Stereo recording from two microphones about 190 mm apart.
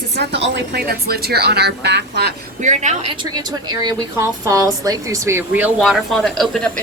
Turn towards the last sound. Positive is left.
turn(degrees=0)  # may be behind; listen again after turning